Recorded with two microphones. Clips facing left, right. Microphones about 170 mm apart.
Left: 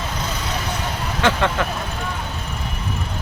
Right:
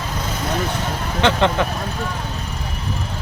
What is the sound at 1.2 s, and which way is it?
Speech, 20° right (ahead or behind).